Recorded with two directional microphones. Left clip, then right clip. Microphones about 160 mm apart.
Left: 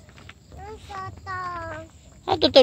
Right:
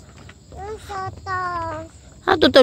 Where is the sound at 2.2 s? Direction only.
45° right (ahead or behind).